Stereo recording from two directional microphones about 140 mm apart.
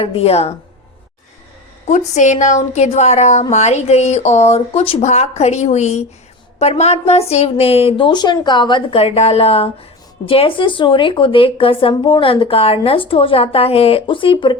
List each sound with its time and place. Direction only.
0.0 s a woman's voice: 45° left (ahead or behind)
1.9 s a woman's voice: 60° left (ahead or behind); by 14.6 s 35° left (ahead or behind)